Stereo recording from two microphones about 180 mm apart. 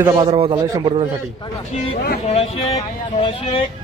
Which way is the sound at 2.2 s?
35° left (ahead or behind).